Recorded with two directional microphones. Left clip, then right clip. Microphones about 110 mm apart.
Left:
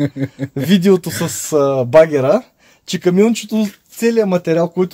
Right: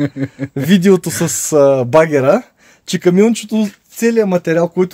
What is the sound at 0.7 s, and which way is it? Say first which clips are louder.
Speech: right 1 dB; 30° right (ahead or behind).